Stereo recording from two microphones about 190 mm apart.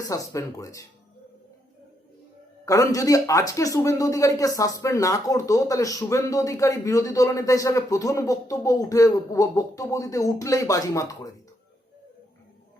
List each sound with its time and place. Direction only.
0.0 s speech: 15° left (ahead or behind)
2.6 s speech: 15° left (ahead or behind)